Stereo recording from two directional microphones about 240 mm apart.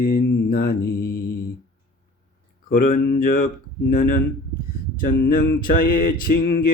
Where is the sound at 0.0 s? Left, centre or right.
Left.